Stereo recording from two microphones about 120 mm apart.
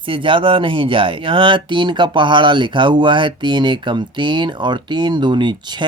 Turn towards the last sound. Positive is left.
turn(degrees=-40)  # may be behind; listen again after turning